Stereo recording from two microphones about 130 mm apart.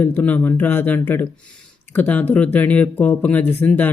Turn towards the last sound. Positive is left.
turn(degrees=15)  # may be behind; listen again after turning